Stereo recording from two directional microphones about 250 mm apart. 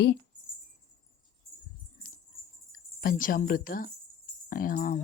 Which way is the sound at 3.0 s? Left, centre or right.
Left.